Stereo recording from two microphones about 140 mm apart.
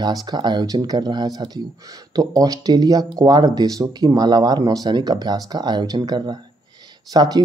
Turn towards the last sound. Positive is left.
turn(degrees=-25)  # may be behind; listen again after turning